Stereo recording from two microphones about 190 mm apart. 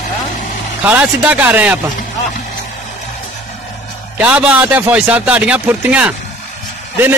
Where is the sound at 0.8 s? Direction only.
10° right (ahead or behind).